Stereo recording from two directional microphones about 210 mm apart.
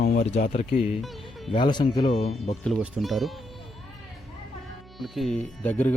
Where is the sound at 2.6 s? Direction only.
Centre (ahead or behind).